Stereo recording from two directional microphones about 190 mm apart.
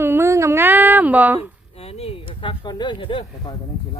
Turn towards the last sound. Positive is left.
turn(degrees=25)  # may be behind; listen again after turning